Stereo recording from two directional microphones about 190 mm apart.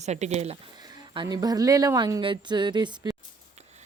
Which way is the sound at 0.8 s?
20° right (ahead or behind).